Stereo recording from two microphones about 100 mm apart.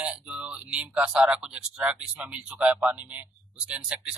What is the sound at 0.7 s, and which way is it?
Speech, 10° right (ahead or behind).